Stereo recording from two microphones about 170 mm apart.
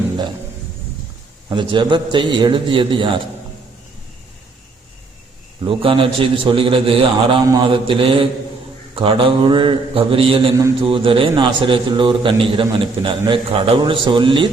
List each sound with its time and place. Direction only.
1.5 s a man's voice: 25° right (ahead or behind)
5.6 s a man's voice: 30° right (ahead or behind)